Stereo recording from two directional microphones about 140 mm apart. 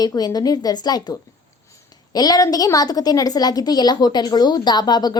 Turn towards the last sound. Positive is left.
turn(degrees=30)  # may be behind; listen again after turning